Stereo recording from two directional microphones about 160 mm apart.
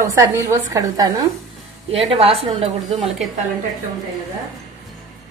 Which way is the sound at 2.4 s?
40° right (ahead or behind).